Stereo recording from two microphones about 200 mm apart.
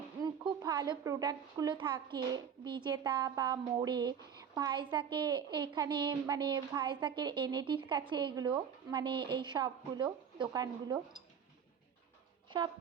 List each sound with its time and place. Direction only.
0.2 s speech: 20° right (ahead or behind)
12.5 s speech: 25° right (ahead or behind)